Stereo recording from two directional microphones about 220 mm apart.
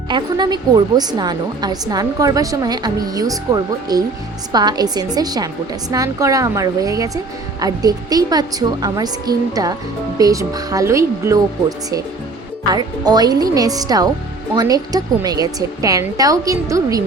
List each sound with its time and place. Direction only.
0.1 s a woman's voice: 20° right (ahead or behind)
12.6 s a woman's voice: 20° right (ahead or behind)